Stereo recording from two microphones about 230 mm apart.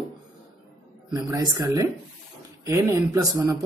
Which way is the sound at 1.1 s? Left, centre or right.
Centre.